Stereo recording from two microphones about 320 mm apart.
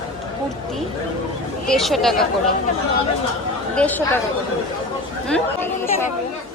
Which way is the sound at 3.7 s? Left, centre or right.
Centre.